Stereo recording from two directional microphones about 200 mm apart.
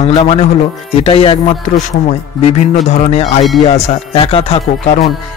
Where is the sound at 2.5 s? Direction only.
35° left (ahead or behind).